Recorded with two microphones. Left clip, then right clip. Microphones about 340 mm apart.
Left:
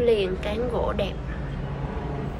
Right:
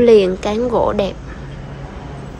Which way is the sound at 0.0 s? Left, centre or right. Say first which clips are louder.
Right 11 dB; centre.